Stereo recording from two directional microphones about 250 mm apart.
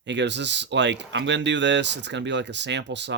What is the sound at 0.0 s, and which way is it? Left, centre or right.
Speech, right.